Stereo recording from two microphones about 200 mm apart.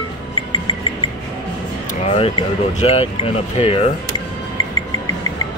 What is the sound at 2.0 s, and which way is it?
Speech, 30° left (ahead or behind).